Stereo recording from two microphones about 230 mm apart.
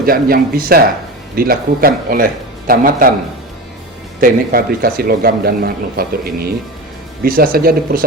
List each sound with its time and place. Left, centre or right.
0.0 s speech: right
4.2 s speech: right